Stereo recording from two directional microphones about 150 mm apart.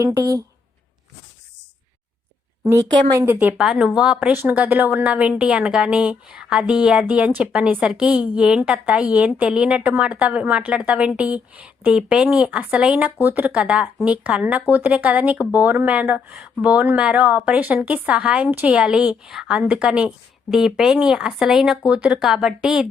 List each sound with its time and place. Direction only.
0.0 s a woman's voice: 25° right (ahead or behind)
2.6 s a woman's voice: 20° right (ahead or behind)
3.3 s a woman's voice: 5° right (ahead or behind)